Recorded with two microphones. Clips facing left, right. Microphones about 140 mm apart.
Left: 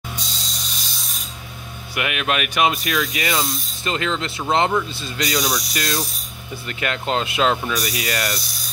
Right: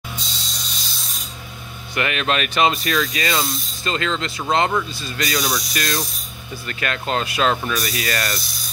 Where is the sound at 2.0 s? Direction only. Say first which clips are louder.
Right 1 dB; 10° left (ahead or behind).